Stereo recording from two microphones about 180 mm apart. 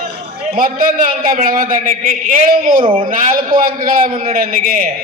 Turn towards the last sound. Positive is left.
turn(degrees=-55)  # may be behind; listen again after turning